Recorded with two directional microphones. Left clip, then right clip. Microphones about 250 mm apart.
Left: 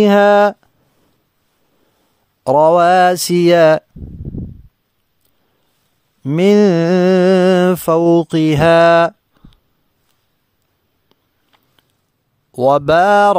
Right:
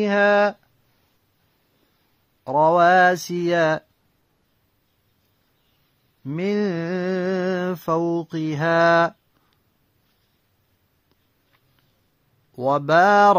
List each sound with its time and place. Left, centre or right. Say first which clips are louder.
0.0 s speech: left 8 dB; left
2.4 s mantra: left 6 dB; left
6.2 s mantra: left 13 dB; left
12.5 s mantra: left 6 dB; left